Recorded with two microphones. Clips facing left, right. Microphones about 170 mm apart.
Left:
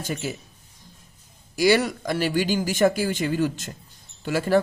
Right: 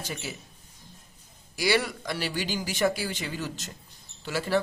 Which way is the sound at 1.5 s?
45° left (ahead or behind).